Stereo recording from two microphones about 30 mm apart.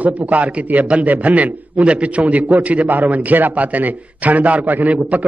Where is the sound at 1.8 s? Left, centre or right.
Right.